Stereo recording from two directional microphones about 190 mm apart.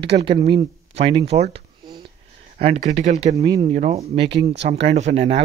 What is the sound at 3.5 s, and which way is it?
Speech, 25° right (ahead or behind).